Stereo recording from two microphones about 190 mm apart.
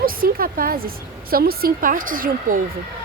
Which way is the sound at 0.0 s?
50° right (ahead or behind).